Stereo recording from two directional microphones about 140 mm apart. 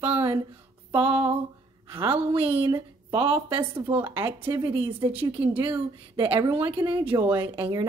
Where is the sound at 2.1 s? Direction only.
10° right (ahead or behind).